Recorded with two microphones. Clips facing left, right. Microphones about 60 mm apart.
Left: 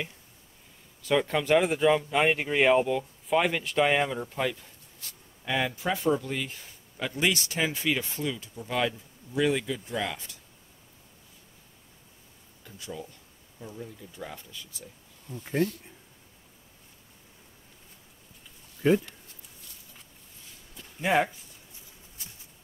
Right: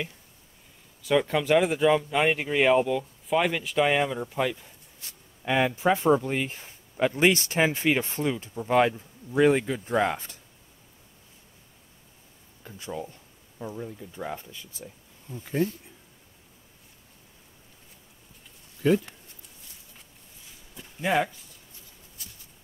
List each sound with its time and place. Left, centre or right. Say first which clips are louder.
1.0 s speech: right 2 dB; centre
5.0 s speech: right 4 dB; right
12.6 s speech: right 4 dB; right
18.8 s speech: even; left
21.0 s speech: even; centre